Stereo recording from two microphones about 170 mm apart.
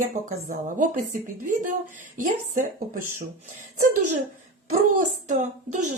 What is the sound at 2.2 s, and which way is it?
Speech, 50° right (ahead or behind).